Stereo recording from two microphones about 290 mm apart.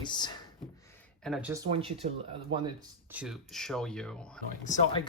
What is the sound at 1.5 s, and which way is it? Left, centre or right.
Speech, centre.